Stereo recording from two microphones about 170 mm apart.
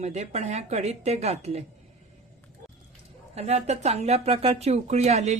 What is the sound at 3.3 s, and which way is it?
Speech, 40° right (ahead or behind).